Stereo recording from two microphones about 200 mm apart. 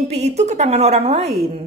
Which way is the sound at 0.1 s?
35° right (ahead or behind).